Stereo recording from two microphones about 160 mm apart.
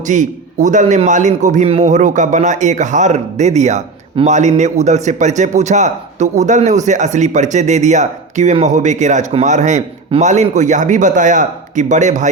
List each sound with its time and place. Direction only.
0.1 s a man's voice: 50° right (ahead or behind)